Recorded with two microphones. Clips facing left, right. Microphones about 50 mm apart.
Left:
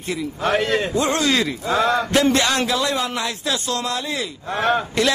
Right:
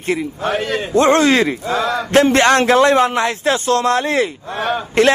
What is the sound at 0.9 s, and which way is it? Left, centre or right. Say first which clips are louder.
Speech: right 8 dB; right.